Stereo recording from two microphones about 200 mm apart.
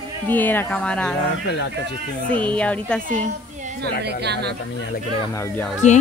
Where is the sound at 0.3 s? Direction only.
10° left (ahead or behind).